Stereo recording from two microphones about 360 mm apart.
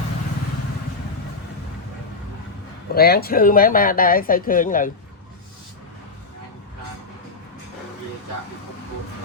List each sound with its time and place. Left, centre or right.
2.9 s speech: left